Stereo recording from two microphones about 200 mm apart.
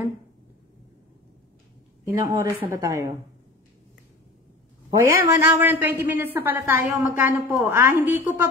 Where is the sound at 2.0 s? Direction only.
15° right (ahead or behind).